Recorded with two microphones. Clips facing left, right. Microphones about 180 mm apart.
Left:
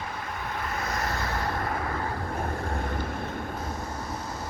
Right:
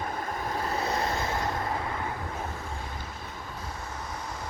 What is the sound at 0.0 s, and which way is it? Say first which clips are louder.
Vehicle: right 3 dB; 45° right (ahead or behind).